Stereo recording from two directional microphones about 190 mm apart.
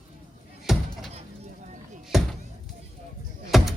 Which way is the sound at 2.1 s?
Centre (ahead or behind).